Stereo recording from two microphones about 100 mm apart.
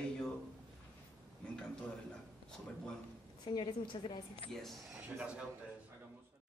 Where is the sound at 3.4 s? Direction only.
45° left (ahead or behind).